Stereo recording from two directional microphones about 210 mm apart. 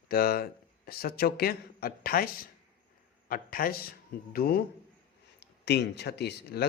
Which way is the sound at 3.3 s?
45° left (ahead or behind).